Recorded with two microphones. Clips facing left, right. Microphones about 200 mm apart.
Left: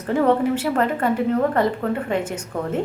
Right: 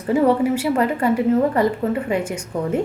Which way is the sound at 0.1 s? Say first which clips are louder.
Right 2 dB; 10° right (ahead or behind).